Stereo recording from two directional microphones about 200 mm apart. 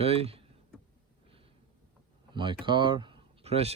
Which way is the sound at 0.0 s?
30° right (ahead or behind).